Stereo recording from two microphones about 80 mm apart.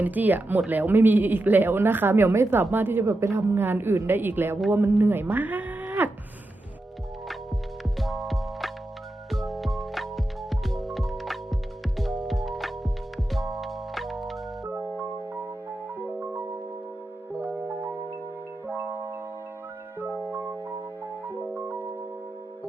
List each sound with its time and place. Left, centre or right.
0.0 s speech: right
7.9 s music: centre
14.7 s keyboard: right
16.0 s music: right
17.4 s music: right
18.7 s marimba: right
20.2 s music: right
21.5 s piano: right